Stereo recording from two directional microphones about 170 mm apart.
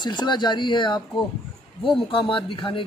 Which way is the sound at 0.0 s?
25° left (ahead or behind).